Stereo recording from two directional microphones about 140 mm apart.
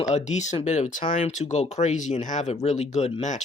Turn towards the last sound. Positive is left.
turn(degrees=55)  # may be behind; listen again after turning